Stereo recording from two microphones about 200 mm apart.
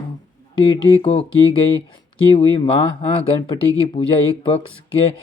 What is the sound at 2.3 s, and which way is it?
Speech, 25° left (ahead or behind).